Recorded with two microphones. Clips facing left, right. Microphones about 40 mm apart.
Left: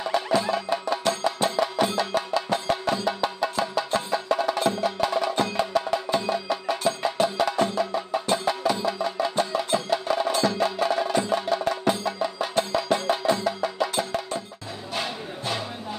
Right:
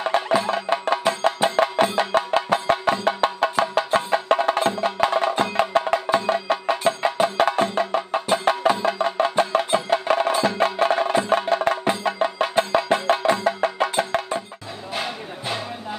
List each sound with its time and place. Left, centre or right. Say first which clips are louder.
0.0 s music: right 3 dB; right
6.7 s wood block: right 3 dB; right
7.7 s music: right 3 dB; right
10.4 s wood block: right 3 dB; right
11.8 s music: right 2 dB; right
12.1 s music: right 5 dB; right
12.9 s wood block: right 2 dB; right
15.0 s music: right 2 dB; centre